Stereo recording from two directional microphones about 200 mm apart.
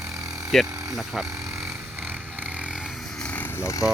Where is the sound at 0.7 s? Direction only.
15° right (ahead or behind).